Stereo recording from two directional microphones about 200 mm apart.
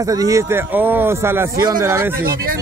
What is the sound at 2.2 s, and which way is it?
Speech, 45° right (ahead or behind).